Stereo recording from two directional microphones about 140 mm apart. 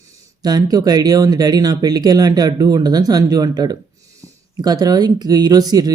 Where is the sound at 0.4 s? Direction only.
30° right (ahead or behind).